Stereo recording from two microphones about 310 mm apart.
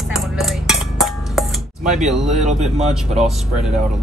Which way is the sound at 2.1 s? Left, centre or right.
Centre.